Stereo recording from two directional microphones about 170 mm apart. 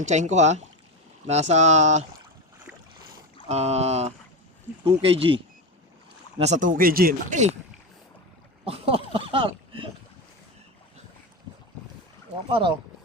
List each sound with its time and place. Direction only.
0.0 s speech: 45° right (ahead or behind)
3.5 s speech: 40° right (ahead or behind)
6.4 s speech: 45° right (ahead or behind)
8.6 s speech: 35° right (ahead or behind)
12.5 s speech: 30° right (ahead or behind)